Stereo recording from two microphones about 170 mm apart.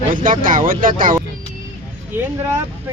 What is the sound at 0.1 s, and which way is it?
Speech, 50° right (ahead or behind).